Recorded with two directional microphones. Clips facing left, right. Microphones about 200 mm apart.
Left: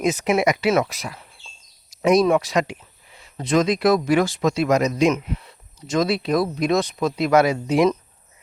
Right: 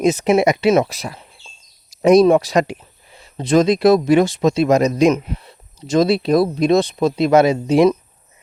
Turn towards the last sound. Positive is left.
turn(degrees=-25)  # may be behind; listen again after turning